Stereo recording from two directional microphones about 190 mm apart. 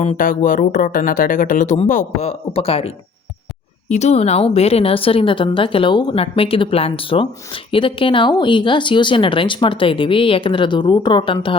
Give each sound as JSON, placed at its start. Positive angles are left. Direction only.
{"t": 0.0, "sound": "a woman's voice", "side_deg": 40}